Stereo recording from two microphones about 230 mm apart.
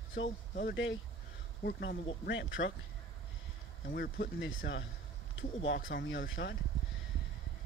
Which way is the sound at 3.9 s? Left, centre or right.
Left.